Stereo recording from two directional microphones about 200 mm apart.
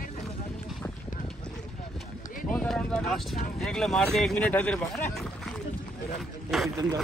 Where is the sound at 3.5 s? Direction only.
Centre (ahead or behind).